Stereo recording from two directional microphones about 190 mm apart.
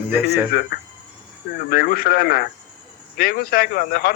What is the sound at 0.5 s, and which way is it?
Speech, 55° left (ahead or behind).